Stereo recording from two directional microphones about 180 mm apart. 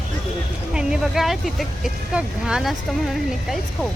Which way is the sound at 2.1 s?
Centre (ahead or behind).